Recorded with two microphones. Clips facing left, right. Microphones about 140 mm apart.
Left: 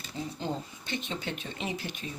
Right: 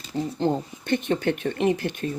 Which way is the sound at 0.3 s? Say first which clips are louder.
Right 13 dB; 55° right (ahead or behind).